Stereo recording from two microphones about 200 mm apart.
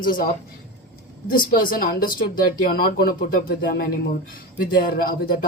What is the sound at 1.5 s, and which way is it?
A man's voice, 45° left (ahead or behind).